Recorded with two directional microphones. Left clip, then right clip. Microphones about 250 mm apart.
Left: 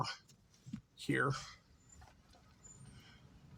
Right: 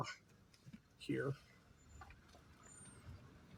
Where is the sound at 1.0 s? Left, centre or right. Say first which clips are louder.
Left 7 dB; left.